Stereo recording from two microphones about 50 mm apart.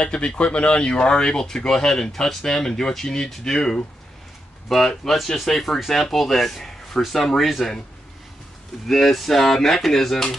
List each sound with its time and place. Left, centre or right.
0.0 s speech: left; by 7.6 s centre
8.8 s speech: centre